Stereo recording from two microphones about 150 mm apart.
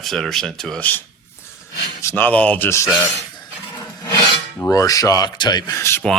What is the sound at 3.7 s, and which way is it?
Filing, 20° left (ahead or behind).